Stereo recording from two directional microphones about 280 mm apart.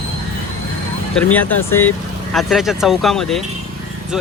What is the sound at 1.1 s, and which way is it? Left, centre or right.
Speech, centre.